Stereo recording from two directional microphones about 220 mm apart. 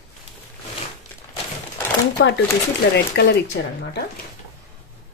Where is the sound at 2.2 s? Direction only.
50° left (ahead or behind).